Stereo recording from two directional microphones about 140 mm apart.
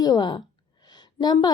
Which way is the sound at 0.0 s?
30° left (ahead or behind).